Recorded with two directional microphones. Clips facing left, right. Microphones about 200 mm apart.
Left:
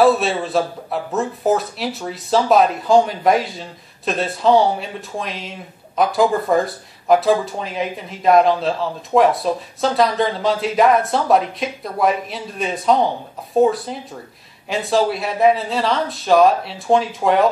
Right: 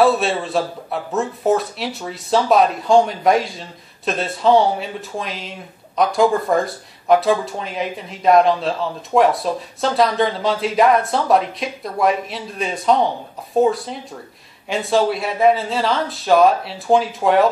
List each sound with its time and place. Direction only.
0.0 s speech: centre (ahead or behind)